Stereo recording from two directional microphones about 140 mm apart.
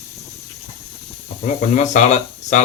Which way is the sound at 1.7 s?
60° left (ahead or behind).